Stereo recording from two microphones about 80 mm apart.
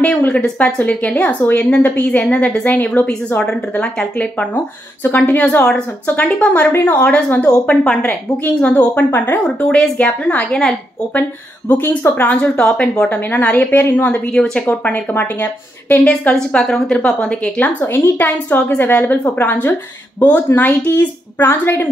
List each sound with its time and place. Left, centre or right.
0.0 s a woman's voice: centre
8.0 s a woman's voice: left
16.0 s a woman's voice: centre; by 21.8 s left